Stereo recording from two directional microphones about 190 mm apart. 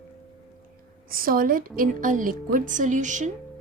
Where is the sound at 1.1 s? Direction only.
50° right (ahead or behind).